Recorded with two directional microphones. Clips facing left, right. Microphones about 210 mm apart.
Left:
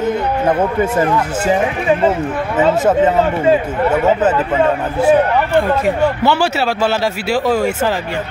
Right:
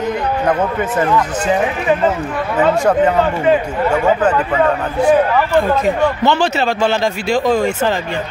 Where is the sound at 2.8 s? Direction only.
20° left (ahead or behind).